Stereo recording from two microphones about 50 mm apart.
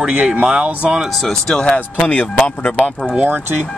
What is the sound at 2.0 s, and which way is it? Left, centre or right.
Speech, left.